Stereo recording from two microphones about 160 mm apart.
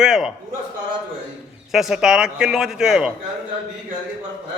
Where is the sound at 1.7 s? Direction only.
5° right (ahead or behind).